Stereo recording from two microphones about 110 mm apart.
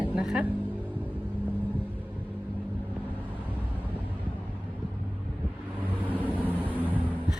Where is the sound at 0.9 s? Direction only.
15° left (ahead or behind).